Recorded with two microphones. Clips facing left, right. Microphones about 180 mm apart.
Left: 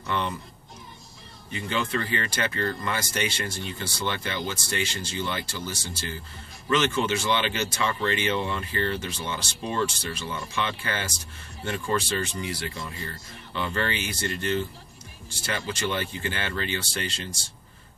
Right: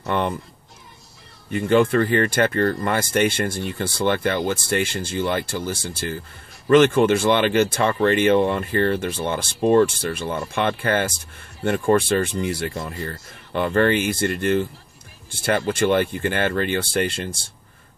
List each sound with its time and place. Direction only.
0.0 s speech: 55° right (ahead or behind)
1.5 s speech: 50° right (ahead or behind)